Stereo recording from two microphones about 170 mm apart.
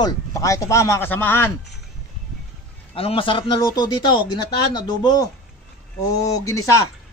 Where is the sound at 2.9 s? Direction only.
35° left (ahead or behind).